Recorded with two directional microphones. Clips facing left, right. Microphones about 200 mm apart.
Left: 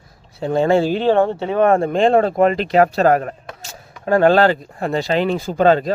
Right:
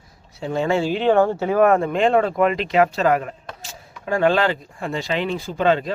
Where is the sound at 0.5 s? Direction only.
35° left (ahead or behind).